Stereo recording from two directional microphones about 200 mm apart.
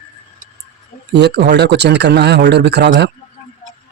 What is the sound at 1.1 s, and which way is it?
Speech, 55° right (ahead or behind).